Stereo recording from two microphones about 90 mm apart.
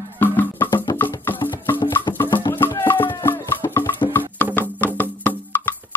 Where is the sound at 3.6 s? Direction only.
50° left (ahead or behind).